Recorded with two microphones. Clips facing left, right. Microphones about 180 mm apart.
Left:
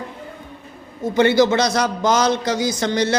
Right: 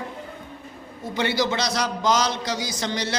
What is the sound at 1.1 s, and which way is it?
A man's voice, 50° left (ahead or behind).